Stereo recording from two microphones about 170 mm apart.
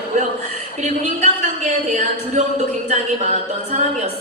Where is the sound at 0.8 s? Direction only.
45° right (ahead or behind).